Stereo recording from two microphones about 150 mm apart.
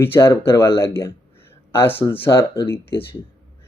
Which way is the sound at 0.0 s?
15° left (ahead or behind).